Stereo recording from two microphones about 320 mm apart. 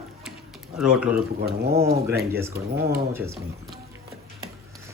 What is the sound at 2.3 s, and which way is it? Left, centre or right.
Speech, centre.